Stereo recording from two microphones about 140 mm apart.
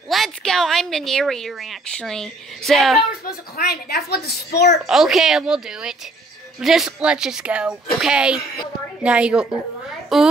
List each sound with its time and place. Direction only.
0.1 s a woman's voice: centre (ahead or behind)
3.3 s speech: 90° left
4.8 s a woman's voice: 5° right (ahead or behind)